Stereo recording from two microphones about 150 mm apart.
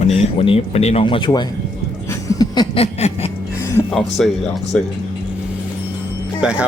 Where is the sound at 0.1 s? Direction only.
40° left (ahead or behind).